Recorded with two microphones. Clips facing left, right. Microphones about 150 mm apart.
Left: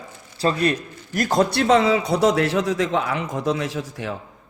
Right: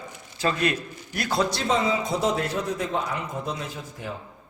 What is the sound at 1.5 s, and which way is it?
A man's voice, 70° left (ahead or behind).